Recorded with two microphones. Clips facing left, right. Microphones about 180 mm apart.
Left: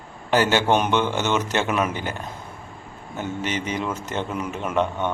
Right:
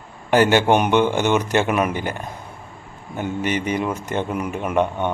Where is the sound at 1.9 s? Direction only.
50° right (ahead or behind).